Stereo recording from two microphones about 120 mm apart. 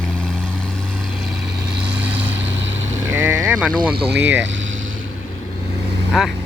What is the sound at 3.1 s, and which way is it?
Speech, 20° right (ahead or behind).